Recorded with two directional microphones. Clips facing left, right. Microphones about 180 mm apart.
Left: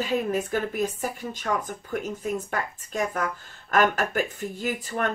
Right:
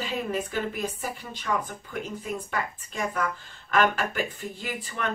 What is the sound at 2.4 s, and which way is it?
Speech, 45° left (ahead or behind).